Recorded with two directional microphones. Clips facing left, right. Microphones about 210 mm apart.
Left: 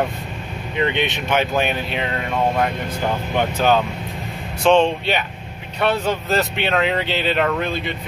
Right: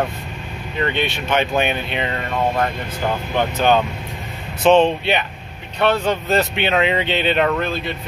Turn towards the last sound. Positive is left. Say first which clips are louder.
# right 2 dB
turn(degrees=0)  # may be behind; listen again after turning